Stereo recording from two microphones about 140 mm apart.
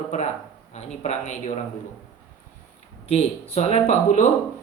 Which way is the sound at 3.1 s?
50° left (ahead or behind).